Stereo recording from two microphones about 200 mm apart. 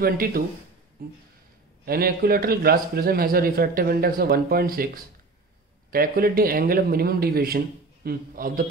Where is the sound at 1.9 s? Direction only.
50° right (ahead or behind).